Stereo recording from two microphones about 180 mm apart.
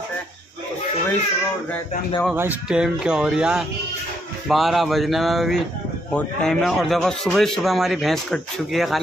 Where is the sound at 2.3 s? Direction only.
10° right (ahead or behind).